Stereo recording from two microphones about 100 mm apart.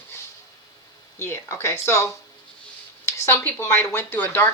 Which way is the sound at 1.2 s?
25° left (ahead or behind).